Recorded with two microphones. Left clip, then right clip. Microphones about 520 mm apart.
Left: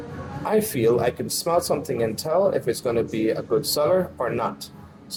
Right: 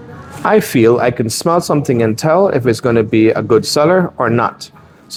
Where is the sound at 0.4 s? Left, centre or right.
Right.